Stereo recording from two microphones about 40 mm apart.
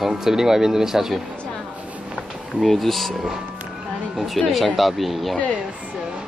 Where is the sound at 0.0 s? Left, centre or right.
Centre.